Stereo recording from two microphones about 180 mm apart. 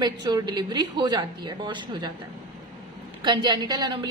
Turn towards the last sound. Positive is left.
turn(degrees=-25)  # may be behind; listen again after turning